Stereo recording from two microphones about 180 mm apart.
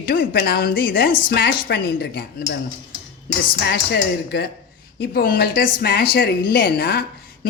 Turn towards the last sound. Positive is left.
turn(degrees=55)  # may be behind; listen again after turning